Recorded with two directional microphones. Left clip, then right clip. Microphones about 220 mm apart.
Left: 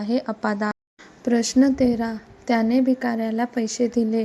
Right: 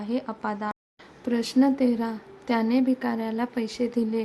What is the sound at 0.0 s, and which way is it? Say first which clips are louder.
A woman's voice: left 5 dB; 20° left (ahead or behind).